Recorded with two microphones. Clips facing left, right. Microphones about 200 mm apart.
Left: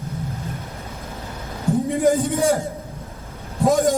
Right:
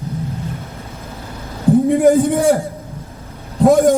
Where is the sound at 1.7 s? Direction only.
60° right (ahead or behind).